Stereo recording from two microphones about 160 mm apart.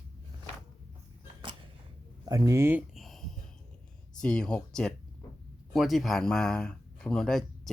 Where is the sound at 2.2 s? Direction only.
20° right (ahead or behind).